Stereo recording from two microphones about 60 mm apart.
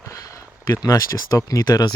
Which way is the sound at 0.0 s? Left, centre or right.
Left.